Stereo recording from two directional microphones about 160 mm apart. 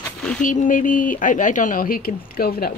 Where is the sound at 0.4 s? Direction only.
55° left (ahead or behind).